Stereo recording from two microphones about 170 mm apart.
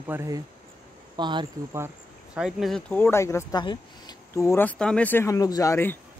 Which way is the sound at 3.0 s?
15° left (ahead or behind).